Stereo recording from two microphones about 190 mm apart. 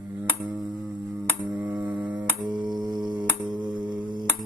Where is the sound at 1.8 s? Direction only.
5° right (ahead or behind).